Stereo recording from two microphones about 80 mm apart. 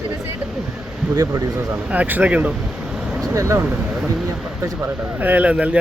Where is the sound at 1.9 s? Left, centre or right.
Right.